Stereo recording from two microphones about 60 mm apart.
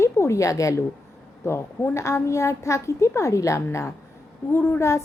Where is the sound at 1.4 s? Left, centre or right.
Left.